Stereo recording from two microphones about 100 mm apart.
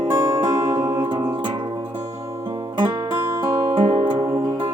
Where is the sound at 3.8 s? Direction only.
70° right (ahead or behind).